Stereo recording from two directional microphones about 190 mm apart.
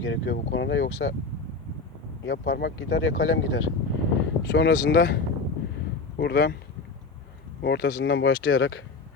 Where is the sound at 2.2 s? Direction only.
65° left (ahead or behind); by 3.6 s 80° left.